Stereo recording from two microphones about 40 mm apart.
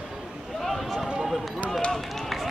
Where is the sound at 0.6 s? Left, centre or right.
Centre.